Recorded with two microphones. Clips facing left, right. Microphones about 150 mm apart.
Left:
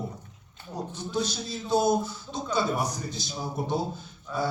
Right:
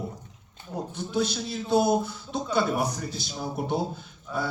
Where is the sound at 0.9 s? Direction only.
60° right (ahead or behind).